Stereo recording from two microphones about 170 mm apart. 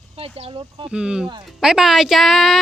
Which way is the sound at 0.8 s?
5° right (ahead or behind).